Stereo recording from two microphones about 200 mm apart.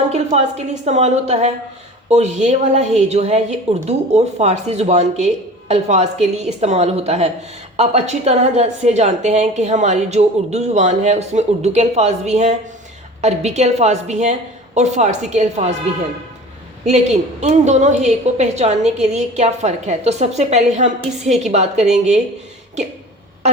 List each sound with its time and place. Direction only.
0.1 s a woman's voice: 35° right (ahead or behind)
16.8 s a woman's voice: 35° right (ahead or behind)
18.8 s a woman's voice: centre (ahead or behind)
19.0 s a woman's voice: 35° right (ahead or behind)